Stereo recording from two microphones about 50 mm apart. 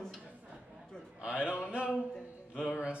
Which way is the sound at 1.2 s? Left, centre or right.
Right.